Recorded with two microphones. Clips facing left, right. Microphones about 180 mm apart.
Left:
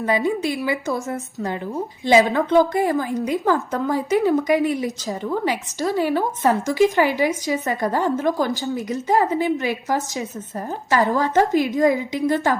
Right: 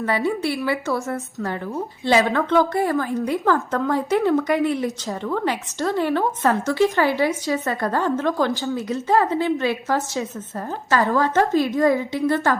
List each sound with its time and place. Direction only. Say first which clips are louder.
0.0 s speech: left 1 dB; 15° left (ahead or behind)